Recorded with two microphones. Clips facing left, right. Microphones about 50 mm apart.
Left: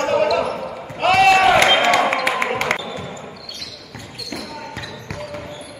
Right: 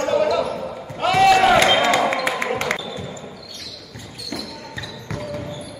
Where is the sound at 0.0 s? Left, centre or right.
Left.